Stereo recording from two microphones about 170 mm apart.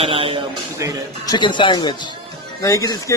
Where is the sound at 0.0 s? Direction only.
35° right (ahead or behind).